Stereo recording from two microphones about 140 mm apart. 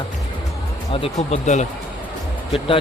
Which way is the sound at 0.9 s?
45° left (ahead or behind).